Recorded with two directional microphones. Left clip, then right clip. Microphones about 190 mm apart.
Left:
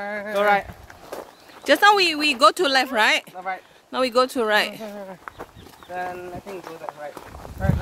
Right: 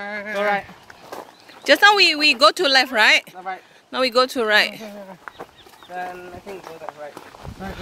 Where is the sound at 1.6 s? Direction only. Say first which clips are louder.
Right 3 dB; 15° left (ahead or behind).